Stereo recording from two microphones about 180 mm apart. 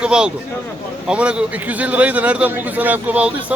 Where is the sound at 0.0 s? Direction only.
5° right (ahead or behind).